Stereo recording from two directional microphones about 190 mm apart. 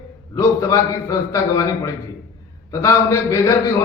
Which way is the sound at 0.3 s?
15° left (ahead or behind).